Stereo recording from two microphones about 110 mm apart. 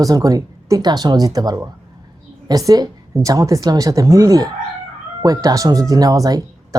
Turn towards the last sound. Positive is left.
turn(degrees=-35)  # may be behind; listen again after turning